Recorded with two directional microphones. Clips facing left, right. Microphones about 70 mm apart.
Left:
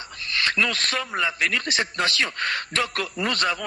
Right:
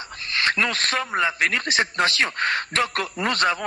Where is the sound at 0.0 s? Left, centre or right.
Right.